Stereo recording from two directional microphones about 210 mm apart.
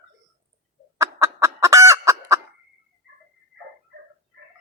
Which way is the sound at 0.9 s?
15° right (ahead or behind).